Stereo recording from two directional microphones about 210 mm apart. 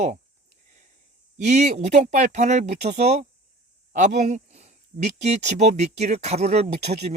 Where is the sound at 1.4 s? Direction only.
35° right (ahead or behind).